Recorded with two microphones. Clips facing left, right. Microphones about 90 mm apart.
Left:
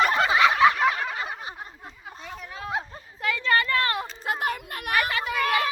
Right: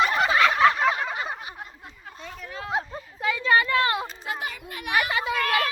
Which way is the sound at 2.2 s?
15° left (ahead or behind).